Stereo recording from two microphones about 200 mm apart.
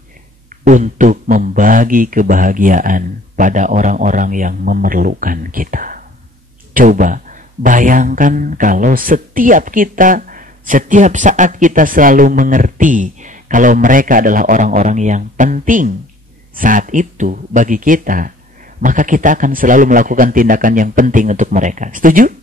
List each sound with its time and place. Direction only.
0.7 s speech: 40° right (ahead or behind)